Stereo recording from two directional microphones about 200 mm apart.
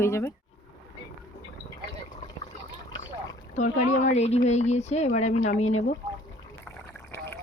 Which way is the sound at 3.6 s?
40° left (ahead or behind).